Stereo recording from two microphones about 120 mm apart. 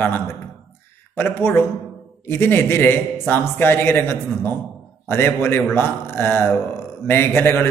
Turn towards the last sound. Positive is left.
turn(degrees=20)  # may be behind; listen again after turning